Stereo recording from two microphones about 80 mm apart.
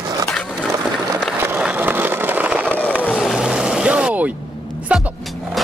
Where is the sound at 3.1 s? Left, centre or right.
Centre.